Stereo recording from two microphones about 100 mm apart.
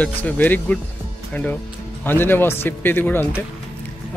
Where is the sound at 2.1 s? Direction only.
20° left (ahead or behind).